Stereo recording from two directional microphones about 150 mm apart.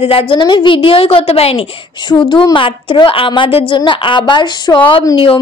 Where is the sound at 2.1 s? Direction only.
30° left (ahead or behind).